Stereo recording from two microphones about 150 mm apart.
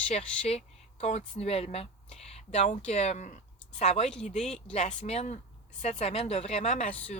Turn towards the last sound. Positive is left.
turn(degrees=45)  # may be behind; listen again after turning